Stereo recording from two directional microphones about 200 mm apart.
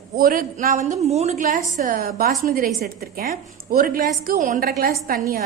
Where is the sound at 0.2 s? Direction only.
45° right (ahead or behind).